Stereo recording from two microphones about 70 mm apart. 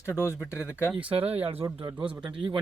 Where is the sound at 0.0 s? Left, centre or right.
Left.